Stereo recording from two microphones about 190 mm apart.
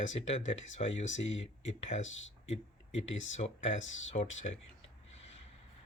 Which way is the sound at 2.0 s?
90° left.